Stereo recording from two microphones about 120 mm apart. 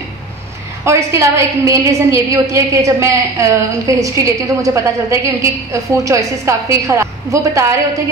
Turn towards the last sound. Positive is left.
turn(degrees=-25)  # may be behind; listen again after turning